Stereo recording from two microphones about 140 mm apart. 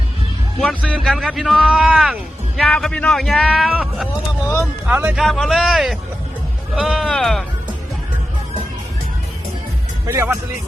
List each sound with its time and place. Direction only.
0.6 s speech: 5° left (ahead or behind); by 5.2 s 10° right (ahead or behind)
5.2 s speech: centre (ahead or behind)
10.1 s speech: 20° right (ahead or behind)